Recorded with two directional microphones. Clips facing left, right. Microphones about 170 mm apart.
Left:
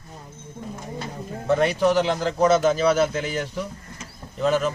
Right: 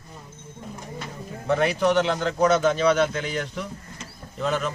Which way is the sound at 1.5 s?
Centre (ahead or behind).